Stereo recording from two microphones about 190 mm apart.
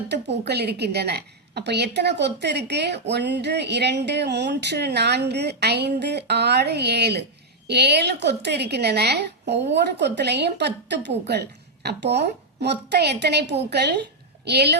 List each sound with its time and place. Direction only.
0.1 s a woman's voice: 60° right (ahead or behind)